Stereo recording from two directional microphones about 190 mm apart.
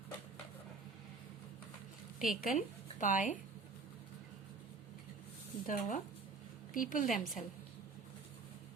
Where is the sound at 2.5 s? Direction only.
45° left (ahead or behind).